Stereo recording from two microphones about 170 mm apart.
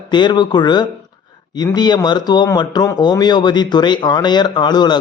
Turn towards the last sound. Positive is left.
turn(degrees=25)  # may be behind; listen again after turning